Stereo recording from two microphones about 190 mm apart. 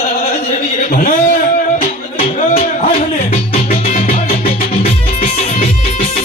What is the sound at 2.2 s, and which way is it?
Music, 40° left (ahead or behind).